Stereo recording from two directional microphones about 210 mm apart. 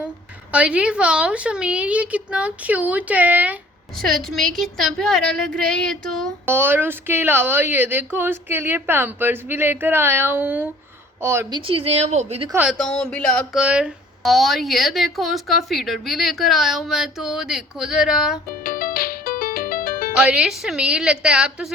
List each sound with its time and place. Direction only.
0.5 s speech: 5° right (ahead or behind)
6.4 s speech: 10° right (ahead or behind)
11.6 s a woman's voice: 25° right (ahead or behind)
12.5 s speech: 5° right (ahead or behind)
12.7 s a sound: 5° left (ahead or behind)
13.6 s speech: 5° right (ahead or behind)
18.6 s music: 45° left (ahead or behind)
20.2 s speech: 5° right (ahead or behind)